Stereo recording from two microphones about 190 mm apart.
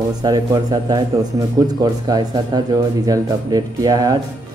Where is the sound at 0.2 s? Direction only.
20° right (ahead or behind).